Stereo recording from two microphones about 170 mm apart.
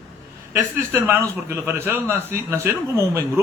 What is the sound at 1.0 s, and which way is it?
A man's voice, 15° right (ahead or behind).